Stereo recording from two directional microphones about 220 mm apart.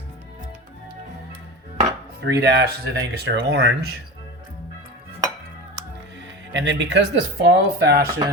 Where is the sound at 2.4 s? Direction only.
50° right (ahead or behind).